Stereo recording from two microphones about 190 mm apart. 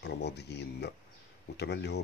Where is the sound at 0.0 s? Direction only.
60° left (ahead or behind).